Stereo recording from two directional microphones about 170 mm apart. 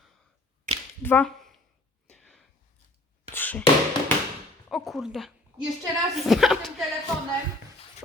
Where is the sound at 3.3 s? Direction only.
10° left (ahead or behind).